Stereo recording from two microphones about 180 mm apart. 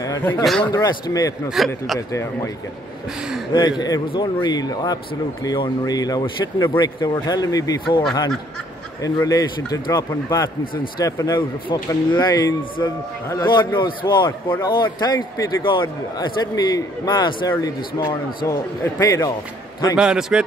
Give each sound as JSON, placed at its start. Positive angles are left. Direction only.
{"t": 0.0, "sound": "a sound", "side_deg": 15}
{"t": 0.4, "sound": "a man's voice", "side_deg": 0}
{"t": 0.7, "sound": "a man's voice", "side_deg": 20}
{"t": 1.6, "sound": "a man's voice", "side_deg": 0}
{"t": 2.0, "sound": "speech", "side_deg": 15}
{"t": 3.8, "sound": "a man's voice", "side_deg": 25}
{"t": 9.0, "sound": "a man's voice", "side_deg": 20}
{"t": 10.6, "sound": "speech", "side_deg": 50}
{"t": 11.0, "sound": "a man's voice", "side_deg": 20}
{"t": 20.0, "sound": "a man's voice", "side_deg": -5}